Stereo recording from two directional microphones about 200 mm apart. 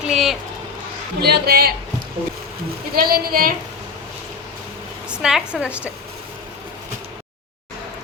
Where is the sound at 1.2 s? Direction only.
55° right (ahead or behind).